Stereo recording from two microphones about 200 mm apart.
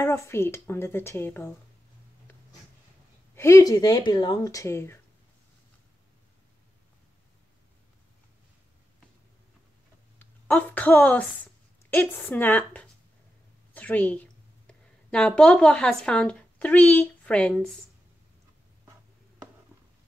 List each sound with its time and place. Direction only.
0.0 s speech: 10° left (ahead or behind)
3.3 s speech: 15° left (ahead or behind)
10.1 s a woman's voice: 10° left (ahead or behind)